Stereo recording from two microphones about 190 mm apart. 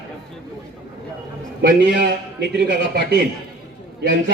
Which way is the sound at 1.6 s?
60° right (ahead or behind).